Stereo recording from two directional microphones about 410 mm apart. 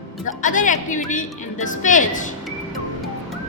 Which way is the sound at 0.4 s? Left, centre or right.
Centre.